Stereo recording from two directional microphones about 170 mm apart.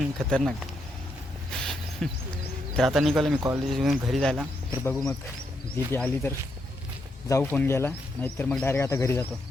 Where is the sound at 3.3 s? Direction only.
20° right (ahead or behind).